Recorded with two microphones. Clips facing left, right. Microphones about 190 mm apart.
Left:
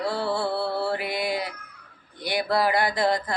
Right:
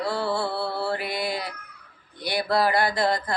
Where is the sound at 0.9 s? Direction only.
15° left (ahead or behind).